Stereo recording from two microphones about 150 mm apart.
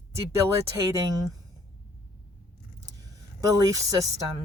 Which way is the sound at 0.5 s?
20° right (ahead or behind).